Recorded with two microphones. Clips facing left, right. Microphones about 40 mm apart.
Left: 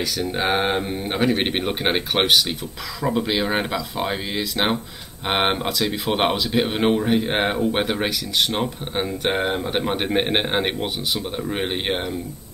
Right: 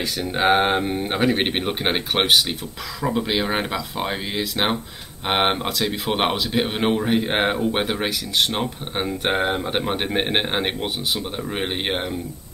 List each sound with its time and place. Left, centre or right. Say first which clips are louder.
0.0 s speech: right 2 dB; centre
7.2 s speech: right 1 dB; centre
7.5 s speech: left 1 dB; centre